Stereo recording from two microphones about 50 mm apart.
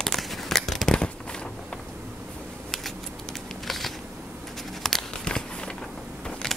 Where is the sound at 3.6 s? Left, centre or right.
Centre.